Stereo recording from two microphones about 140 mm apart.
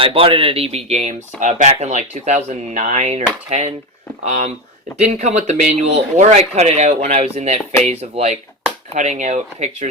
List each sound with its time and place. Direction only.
0.0 s speech: 40° right (ahead or behind)